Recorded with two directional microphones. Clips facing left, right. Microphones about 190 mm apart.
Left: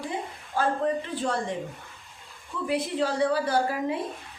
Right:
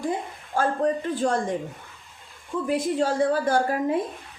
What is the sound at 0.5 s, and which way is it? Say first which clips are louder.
Speech: right 2 dB; 50° right (ahead or behind).